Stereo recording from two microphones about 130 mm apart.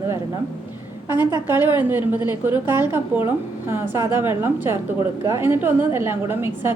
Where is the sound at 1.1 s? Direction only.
15° right (ahead or behind).